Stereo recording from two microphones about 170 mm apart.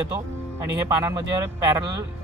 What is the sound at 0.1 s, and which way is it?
Speech, 20° right (ahead or behind).